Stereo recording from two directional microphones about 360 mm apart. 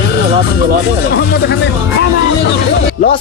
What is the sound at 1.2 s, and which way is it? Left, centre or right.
Speech, left.